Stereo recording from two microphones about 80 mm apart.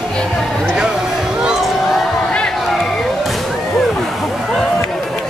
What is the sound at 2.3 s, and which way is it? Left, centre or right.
Music, centre.